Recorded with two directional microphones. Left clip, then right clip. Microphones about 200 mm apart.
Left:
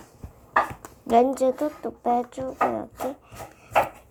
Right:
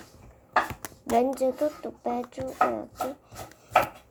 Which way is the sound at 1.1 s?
15° left (ahead or behind).